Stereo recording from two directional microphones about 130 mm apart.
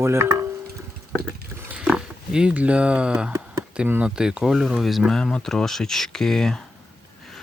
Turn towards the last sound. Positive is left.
turn(degrees=5)  # may be behind; listen again after turning